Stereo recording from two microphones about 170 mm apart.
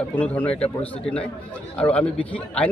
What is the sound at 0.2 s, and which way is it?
A man's voice, 10° left (ahead or behind).